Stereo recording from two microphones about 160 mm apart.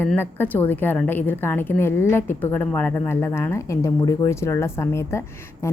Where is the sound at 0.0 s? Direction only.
10° left (ahead or behind).